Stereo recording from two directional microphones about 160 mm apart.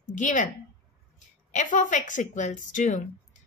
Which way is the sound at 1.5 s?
55° left (ahead or behind).